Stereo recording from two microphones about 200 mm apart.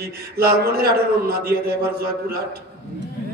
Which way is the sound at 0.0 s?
50° right (ahead or behind).